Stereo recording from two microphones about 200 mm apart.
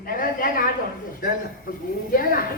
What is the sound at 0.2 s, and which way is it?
Speech, 45° left (ahead or behind).